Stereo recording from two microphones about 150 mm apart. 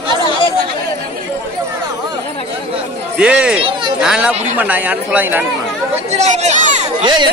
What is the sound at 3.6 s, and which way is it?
Chatter, 35° right (ahead or behind).